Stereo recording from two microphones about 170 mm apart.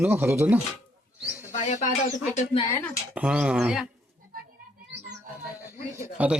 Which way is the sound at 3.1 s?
5° right (ahead or behind).